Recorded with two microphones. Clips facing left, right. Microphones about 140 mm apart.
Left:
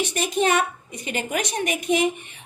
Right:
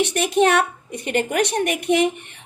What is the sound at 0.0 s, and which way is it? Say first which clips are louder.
A woman's voice: right 5 dB; 65° right (ahead or behind).